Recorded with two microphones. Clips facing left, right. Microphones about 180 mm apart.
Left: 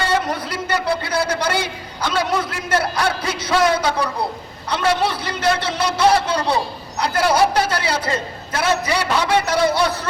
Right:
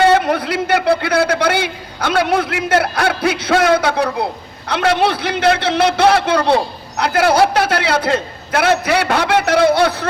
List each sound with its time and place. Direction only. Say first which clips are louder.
0.1 s a man's voice: right 7 dB; 60° right (ahead or behind)